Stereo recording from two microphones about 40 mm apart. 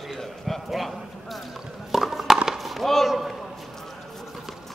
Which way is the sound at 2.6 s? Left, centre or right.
Centre.